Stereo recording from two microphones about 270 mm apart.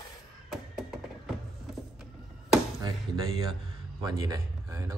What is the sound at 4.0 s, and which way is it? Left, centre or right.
Speech, centre.